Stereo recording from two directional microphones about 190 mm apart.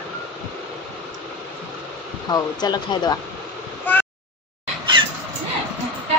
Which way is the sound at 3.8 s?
10° left (ahead or behind).